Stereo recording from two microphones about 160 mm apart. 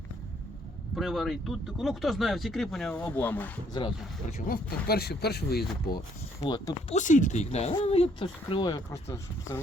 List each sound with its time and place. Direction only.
0.9 s speech: centre (ahead or behind)
4.3 s speech: 50° left (ahead or behind)
4.5 s speech: 80° left
6.4 s speech: 25° left (ahead or behind)
6.9 s speech: 50° left (ahead or behind); by 8.8 s 30° left (ahead or behind)
9.0 s speech: 15° left (ahead or behind)